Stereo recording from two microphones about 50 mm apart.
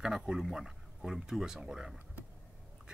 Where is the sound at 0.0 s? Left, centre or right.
Centre.